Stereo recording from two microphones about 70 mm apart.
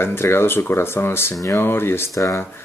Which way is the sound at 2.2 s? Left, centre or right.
Left.